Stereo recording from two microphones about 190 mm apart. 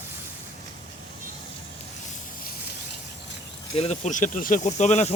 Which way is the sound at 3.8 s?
35° left (ahead or behind).